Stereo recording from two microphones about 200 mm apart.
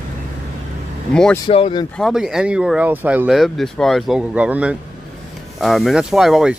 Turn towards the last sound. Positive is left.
turn(degrees=-5)  # may be behind; listen again after turning